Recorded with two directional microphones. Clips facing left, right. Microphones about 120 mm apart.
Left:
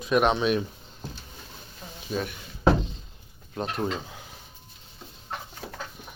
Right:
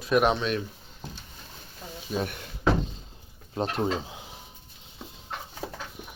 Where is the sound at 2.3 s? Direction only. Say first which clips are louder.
Left 6 dB; 55° right (ahead or behind).